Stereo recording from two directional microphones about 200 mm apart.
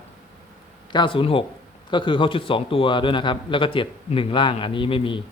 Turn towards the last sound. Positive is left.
turn(degrees=25)  # may be behind; listen again after turning